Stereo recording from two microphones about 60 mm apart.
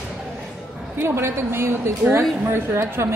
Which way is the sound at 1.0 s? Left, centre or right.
Right.